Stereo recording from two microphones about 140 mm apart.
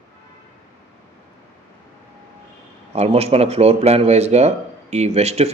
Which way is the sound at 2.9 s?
50° right (ahead or behind).